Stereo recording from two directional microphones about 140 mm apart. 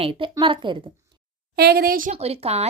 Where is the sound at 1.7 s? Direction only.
90° right.